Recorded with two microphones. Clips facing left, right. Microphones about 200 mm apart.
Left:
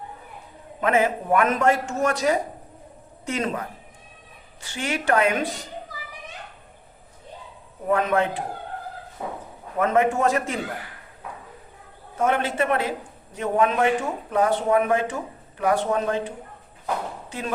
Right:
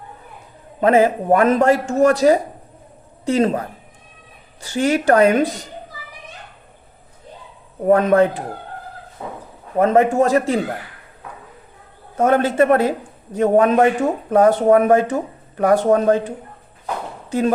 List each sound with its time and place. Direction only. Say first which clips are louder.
0.8 s a man's voice: right 7 dB; 35° right (ahead or behind)
4.6 s a man's voice: right 10 dB; 40° right (ahead or behind)
7.9 s a man's voice: right 8 dB; 40° right (ahead or behind)
9.7 s a man's voice: right 6 dB; 35° right (ahead or behind)
12.1 s speech: right 7 dB; 45° right (ahead or behind)